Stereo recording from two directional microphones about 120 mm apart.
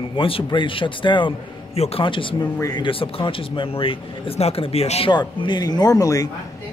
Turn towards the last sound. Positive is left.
turn(degrees=30)  # may be behind; listen again after turning